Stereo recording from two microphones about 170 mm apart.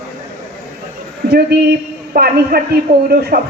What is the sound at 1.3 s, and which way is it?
A woman's voice, 65° right (ahead or behind).